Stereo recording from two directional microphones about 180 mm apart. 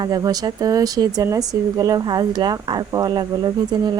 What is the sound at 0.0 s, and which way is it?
Speech, 20° right (ahead or behind).